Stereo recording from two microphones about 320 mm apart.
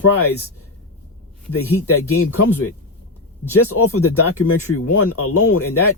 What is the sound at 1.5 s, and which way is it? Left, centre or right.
Speech, left.